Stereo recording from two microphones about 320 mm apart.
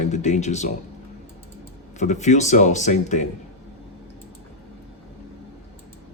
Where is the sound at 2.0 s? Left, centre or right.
Left.